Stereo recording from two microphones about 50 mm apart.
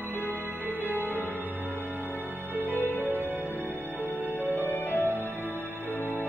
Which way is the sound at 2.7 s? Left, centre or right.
Left.